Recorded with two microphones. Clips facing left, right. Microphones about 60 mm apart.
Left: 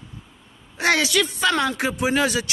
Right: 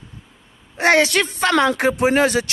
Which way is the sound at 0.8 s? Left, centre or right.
Right.